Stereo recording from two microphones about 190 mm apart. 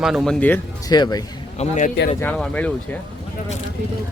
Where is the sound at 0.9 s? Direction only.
20° left (ahead or behind).